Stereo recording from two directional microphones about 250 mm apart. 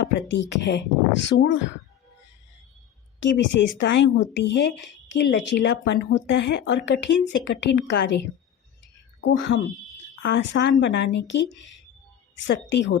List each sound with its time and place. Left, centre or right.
0.1 s speech: left
3.2 s speech: left
9.2 s speech: left